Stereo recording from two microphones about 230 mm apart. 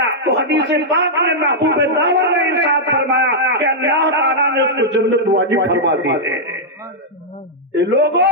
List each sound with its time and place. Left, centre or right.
0.2 s a man's voice: right
7.8 s a man's voice: right